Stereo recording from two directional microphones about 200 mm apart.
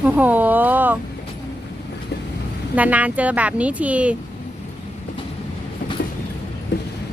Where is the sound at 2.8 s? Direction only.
5° right (ahead or behind).